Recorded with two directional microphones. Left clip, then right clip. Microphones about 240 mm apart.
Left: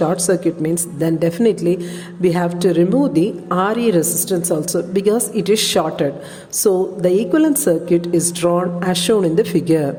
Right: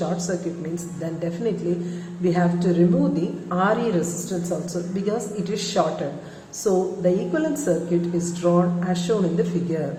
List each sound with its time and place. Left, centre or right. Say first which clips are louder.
0.0 s a woman's voice: left 10 dB; left